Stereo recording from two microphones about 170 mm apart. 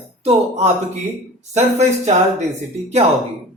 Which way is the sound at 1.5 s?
40° right (ahead or behind).